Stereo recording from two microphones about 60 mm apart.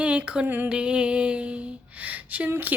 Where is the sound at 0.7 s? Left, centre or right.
Centre.